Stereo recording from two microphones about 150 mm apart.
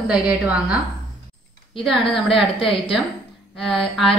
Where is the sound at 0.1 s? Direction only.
5° right (ahead or behind).